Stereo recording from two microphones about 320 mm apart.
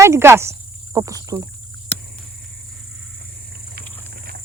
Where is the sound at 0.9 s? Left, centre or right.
Centre.